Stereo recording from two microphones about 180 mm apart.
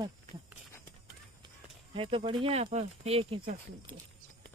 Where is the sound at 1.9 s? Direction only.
30° right (ahead or behind).